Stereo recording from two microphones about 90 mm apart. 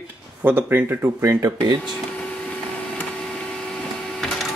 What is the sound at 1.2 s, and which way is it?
Speech, 35° right (ahead or behind).